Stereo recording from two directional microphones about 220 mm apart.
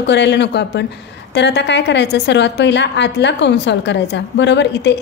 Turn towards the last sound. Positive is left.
turn(degrees=50)  # may be behind; listen again after turning